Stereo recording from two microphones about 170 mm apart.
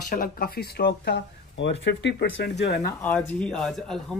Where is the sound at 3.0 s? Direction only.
5° left (ahead or behind).